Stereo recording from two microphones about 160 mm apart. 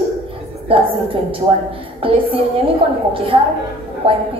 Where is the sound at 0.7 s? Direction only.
35° right (ahead or behind).